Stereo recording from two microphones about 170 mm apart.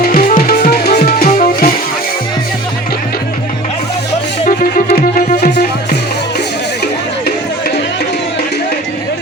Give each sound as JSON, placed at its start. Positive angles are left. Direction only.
{"t": 0.0, "sound": "music", "side_deg": 50}
{"t": 4.4, "sound": "music", "side_deg": 60}